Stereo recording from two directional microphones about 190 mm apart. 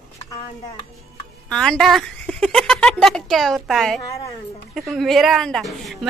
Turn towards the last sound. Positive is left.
turn(degrees=0)  # may be behind; listen again after turning